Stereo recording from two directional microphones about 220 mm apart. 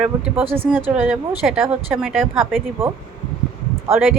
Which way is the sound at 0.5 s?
10° right (ahead or behind).